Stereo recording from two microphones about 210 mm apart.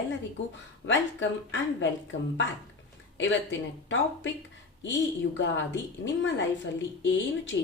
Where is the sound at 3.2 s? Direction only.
60° left (ahead or behind).